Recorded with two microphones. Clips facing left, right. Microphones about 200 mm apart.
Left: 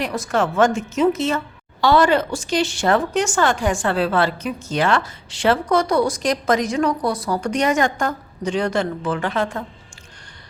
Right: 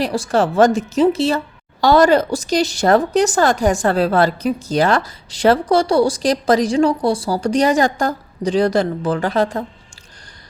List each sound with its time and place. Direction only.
0.0 s a woman's voice: 30° right (ahead or behind)